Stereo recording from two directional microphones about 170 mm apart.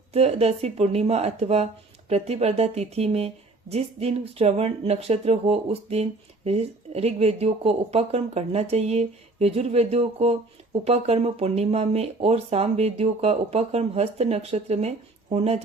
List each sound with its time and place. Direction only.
0.1 s speech: 35° right (ahead or behind)